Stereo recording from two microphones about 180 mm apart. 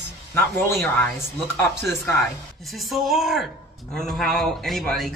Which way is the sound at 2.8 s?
Centre (ahead or behind).